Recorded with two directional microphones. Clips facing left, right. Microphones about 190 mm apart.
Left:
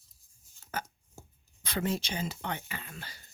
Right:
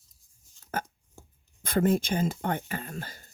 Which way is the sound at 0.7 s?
50° right (ahead or behind).